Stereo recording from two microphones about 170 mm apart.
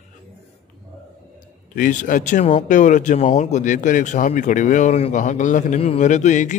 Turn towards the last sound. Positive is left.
turn(degrees=45)  # may be behind; listen again after turning